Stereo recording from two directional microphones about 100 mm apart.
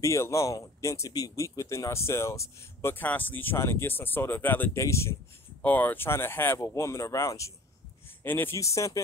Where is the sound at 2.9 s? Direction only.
15° left (ahead or behind).